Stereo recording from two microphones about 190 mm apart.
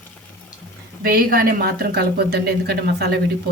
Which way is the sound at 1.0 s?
50° right (ahead or behind).